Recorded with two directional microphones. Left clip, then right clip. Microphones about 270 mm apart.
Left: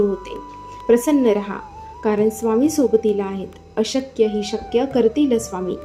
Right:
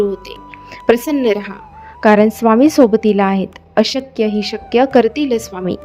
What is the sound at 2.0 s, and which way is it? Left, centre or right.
A woman's voice, right.